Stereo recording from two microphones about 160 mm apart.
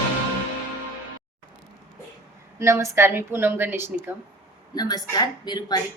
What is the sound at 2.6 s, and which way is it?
A woman's voice, 20° right (ahead or behind).